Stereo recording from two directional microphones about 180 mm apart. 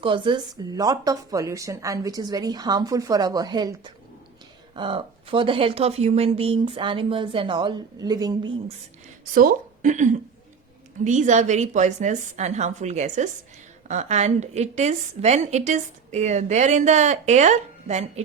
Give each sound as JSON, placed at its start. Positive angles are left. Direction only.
{"t": 0.0, "sound": "speech", "side_deg": -30}
{"t": 9.3, "sound": "a woman's voice", "side_deg": -50}